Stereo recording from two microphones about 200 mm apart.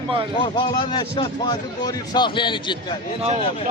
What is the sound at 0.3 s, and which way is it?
Speech, 25° left (ahead or behind).